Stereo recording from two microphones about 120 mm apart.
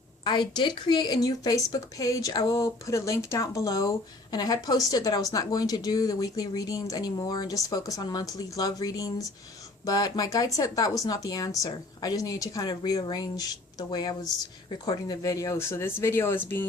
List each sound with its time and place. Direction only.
0.3 s speech: 40° left (ahead or behind); by 16.6 s 20° left (ahead or behind)